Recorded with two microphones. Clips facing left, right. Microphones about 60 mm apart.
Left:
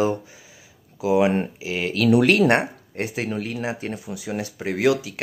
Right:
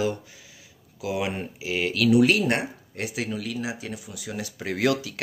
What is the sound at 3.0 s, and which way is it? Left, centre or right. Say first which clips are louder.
Speech: left 4 dB; left.